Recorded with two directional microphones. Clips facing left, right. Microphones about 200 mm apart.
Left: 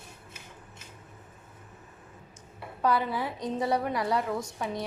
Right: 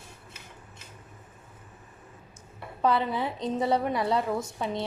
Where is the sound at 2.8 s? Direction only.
25° right (ahead or behind).